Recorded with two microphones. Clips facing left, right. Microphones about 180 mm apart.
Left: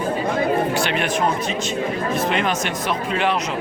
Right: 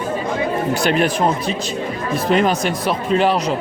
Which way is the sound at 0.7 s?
40° right (ahead or behind).